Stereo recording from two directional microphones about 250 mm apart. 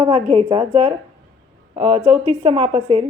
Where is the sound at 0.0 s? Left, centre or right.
Right.